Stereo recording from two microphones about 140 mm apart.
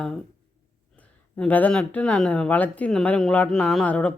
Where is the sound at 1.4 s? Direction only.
10° left (ahead or behind).